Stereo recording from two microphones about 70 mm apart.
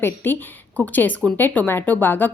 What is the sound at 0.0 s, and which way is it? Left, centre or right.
A woman's voice, left.